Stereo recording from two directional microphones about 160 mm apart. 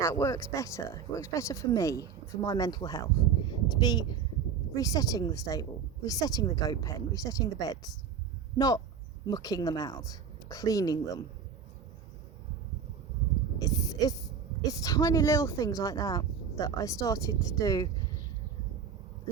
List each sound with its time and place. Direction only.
0.0 s speech: 20° left (ahead or behind)
13.6 s a sound: 20° left (ahead or behind)
14.7 s speech: 20° left (ahead or behind)